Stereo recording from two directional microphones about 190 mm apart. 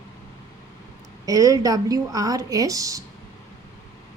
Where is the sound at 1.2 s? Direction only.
20° right (ahead or behind).